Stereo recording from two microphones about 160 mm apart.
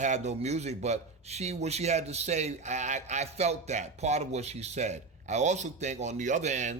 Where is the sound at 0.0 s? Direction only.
45° right (ahead or behind).